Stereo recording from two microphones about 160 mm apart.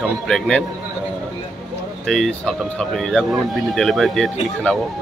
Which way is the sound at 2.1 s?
5° left (ahead or behind).